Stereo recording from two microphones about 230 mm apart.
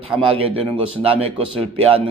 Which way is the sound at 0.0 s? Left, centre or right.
Right.